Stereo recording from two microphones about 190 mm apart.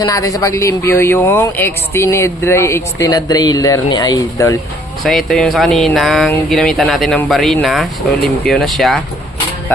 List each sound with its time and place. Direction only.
0.0 s speech: 15° left (ahead or behind)
5.0 s speech: centre (ahead or behind)